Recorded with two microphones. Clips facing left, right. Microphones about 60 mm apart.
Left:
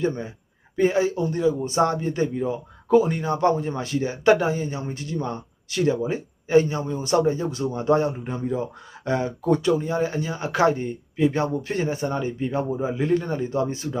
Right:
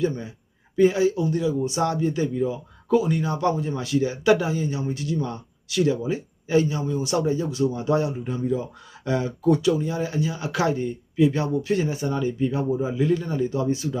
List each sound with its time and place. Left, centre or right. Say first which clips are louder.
0.0 s a man's voice: even; left